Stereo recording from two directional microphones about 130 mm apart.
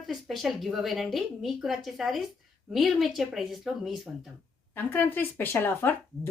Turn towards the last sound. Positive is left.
turn(degrees=15)  # may be behind; listen again after turning